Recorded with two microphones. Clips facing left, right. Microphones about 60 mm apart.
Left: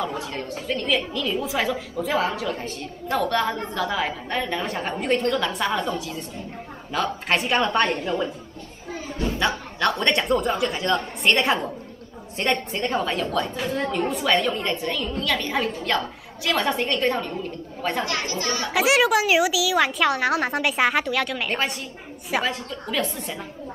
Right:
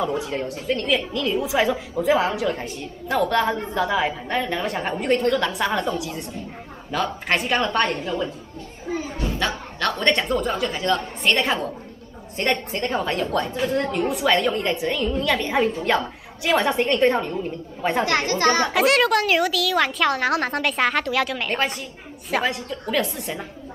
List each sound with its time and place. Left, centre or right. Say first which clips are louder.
0.2 s a woman's voice: right 3 dB; centre
7.7 s a woman's voice: even; centre
9.4 s a woman's voice: left 2 dB; centre
18.0 s speech: right 7 dB; right
18.7 s a woman's voice: right 1 dB; centre